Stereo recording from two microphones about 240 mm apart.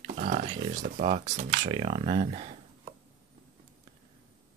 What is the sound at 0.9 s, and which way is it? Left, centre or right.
Speech, right.